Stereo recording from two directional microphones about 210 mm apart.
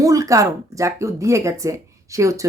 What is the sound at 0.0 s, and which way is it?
Speech, 15° right (ahead or behind).